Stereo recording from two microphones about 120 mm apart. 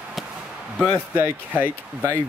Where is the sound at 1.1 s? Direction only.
15° right (ahead or behind).